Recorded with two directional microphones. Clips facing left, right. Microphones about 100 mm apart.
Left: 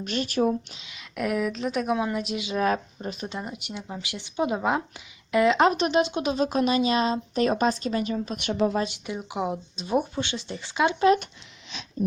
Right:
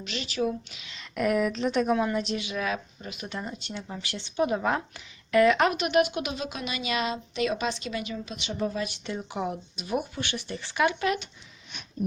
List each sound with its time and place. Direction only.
0.0 s speech: 45° left (ahead or behind)
1.1 s speech: centre (ahead or behind)
2.6 s speech: 40° left (ahead or behind)
3.2 s speech: 15° left (ahead or behind); by 8.5 s 50° left (ahead or behind)
8.8 s speech: 15° left (ahead or behind)
11.7 s wheeze: 90° left